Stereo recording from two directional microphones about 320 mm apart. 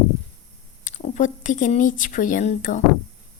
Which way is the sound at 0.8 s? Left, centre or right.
Left.